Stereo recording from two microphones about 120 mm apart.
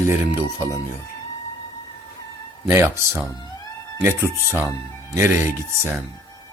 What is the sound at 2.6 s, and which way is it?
Speech, 20° right (ahead or behind).